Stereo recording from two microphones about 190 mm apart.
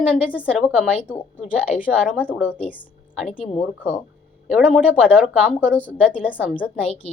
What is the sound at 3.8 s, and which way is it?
Speech, 5° left (ahead or behind).